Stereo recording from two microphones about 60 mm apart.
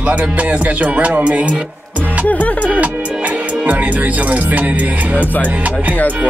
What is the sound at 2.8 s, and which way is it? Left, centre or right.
Music, right.